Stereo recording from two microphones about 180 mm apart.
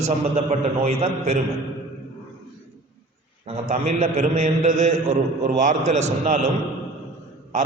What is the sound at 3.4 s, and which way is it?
A man's voice, 40° right (ahead or behind).